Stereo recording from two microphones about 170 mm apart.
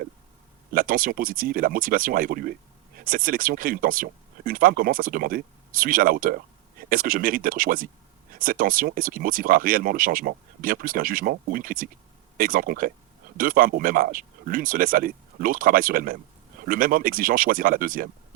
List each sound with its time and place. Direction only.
0.7 s speech: 55° right (ahead or behind)